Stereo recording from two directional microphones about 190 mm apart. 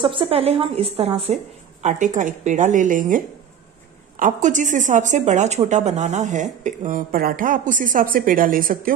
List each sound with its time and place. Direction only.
0.0 s speech: 25° right (ahead or behind); by 3.2 s 45° right (ahead or behind)
4.2 s speech: 40° right (ahead or behind)